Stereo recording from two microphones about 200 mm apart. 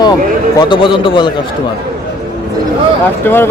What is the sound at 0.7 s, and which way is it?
Speech, 25° left (ahead or behind).